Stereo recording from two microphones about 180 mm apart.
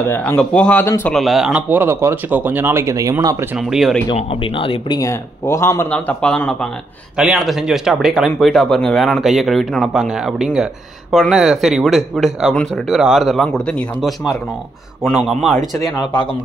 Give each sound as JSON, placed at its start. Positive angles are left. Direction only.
{"t": 0.1, "sound": "speech", "side_deg": 10}
{"t": 1.1, "sound": "speech", "side_deg": 0}
{"t": 3.5, "sound": "speech", "side_deg": 0}
{"t": 4.1, "sound": "speech", "side_deg": 30}